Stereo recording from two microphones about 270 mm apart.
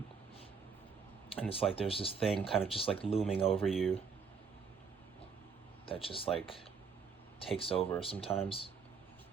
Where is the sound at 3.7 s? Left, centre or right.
Centre.